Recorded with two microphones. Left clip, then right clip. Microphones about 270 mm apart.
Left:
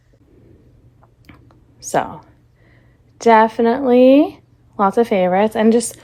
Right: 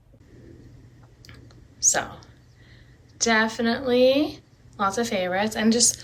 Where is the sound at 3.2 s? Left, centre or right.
Centre.